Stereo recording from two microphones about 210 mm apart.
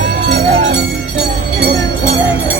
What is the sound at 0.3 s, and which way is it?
Music, 60° right (ahead or behind).